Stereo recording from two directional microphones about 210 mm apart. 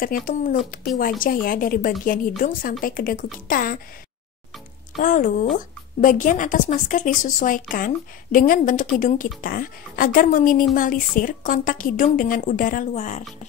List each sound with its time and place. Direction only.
0.0 s speech: 40° left (ahead or behind)
5.0 s speech: 40° left (ahead or behind)